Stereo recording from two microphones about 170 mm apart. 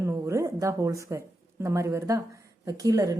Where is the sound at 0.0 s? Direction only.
15° right (ahead or behind).